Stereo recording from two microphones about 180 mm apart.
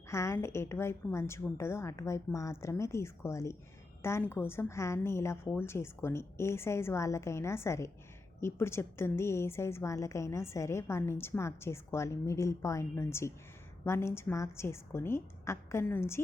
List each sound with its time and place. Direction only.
0.1 s a woman's voice: 15° left (ahead or behind)